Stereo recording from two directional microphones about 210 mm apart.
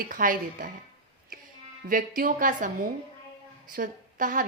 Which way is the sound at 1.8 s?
40° right (ahead or behind).